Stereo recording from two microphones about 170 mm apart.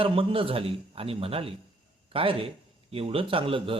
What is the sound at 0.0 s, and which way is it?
A man's voice, 30° right (ahead or behind).